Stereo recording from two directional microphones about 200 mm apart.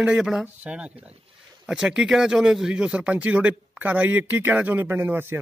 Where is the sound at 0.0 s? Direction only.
5° right (ahead or behind).